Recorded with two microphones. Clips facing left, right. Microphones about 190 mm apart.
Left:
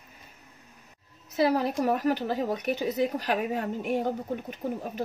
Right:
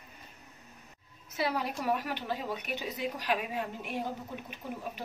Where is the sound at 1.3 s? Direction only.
40° left (ahead or behind).